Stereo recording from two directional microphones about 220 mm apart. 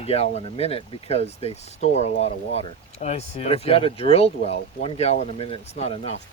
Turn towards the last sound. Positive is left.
turn(degrees=30)  # may be behind; listen again after turning